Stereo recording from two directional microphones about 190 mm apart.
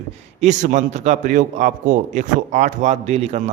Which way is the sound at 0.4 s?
40° right (ahead or behind).